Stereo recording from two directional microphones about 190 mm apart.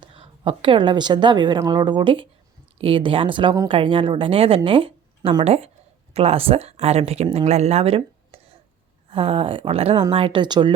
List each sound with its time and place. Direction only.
0.0 s a woman's voice: 25° right (ahead or behind)